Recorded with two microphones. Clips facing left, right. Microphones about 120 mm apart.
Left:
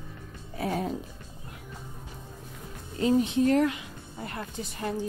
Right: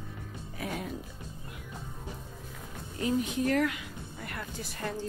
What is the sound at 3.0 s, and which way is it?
Speech, 25° left (ahead or behind).